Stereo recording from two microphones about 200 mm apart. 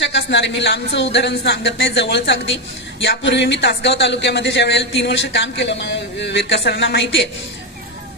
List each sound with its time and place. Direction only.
0.0 s speech: 65° left (ahead or behind)